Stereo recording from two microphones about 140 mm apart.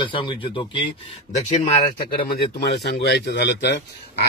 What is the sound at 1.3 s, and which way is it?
Speech, 55° left (ahead or behind).